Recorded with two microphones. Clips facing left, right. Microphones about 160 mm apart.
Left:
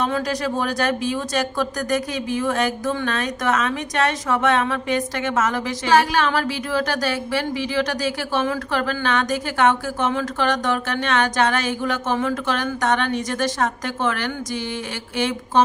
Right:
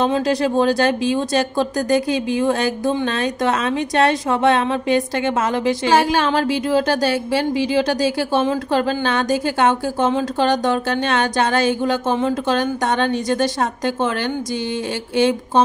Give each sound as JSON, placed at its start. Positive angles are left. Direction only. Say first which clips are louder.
{"t": 0.0, "sound": "a woman's voice", "louder": "right 5 dB", "side_deg": -25}